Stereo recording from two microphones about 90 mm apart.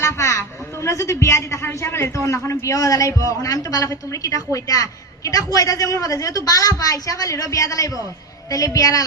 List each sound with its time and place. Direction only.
0.0 s a man's voice: 35° left (ahead or behind)